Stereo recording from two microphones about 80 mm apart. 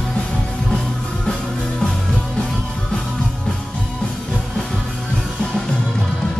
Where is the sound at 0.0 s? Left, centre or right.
Centre.